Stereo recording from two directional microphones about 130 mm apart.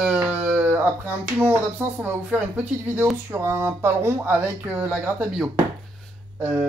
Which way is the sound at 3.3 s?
20° right (ahead or behind).